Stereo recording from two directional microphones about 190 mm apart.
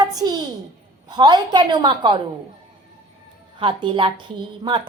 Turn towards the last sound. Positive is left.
turn(degrees=-25)  # may be behind; listen again after turning